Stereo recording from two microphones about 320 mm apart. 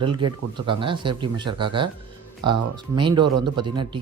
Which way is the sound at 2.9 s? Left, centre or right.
Centre.